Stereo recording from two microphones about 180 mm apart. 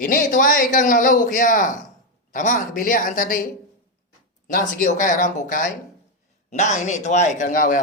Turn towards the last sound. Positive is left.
turn(degrees=45)  # may be behind; listen again after turning